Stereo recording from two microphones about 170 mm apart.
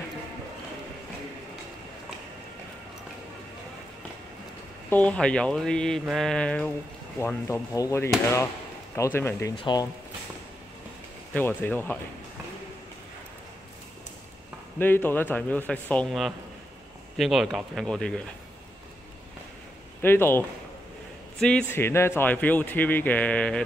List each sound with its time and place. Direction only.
4.8 s speech: 10° left (ahead or behind)
9.6 s speech: 25° left (ahead or behind)
11.3 s speech: 10° left (ahead or behind)
14.8 s speech: 10° left (ahead or behind)
20.0 s speech: 15° left (ahead or behind)